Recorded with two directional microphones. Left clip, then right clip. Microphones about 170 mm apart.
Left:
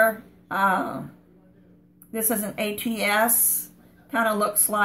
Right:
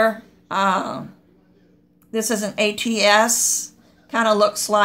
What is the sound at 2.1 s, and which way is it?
Speech, 45° right (ahead or behind).